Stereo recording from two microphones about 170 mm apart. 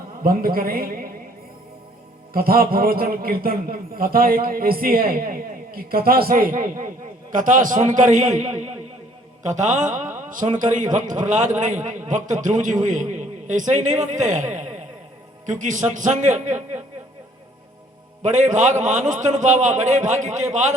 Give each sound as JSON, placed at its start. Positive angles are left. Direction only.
{"t": 0.2, "sound": "speech", "side_deg": -55}
{"t": 2.3, "sound": "a man's voice", "side_deg": -60}
{"t": 10.0, "sound": "a sound", "side_deg": -15}
{"t": 10.5, "sound": "a man's voice", "side_deg": -50}
{"t": 18.2, "sound": "a man's voice", "side_deg": -45}